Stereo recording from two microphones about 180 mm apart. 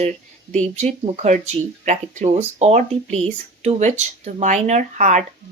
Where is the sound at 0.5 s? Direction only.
40° right (ahead or behind).